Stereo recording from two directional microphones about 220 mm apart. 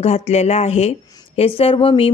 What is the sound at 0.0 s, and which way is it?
Speech, 30° left (ahead or behind).